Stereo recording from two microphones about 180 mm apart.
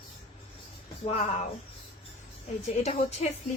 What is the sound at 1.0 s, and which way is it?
Speech, 35° left (ahead or behind).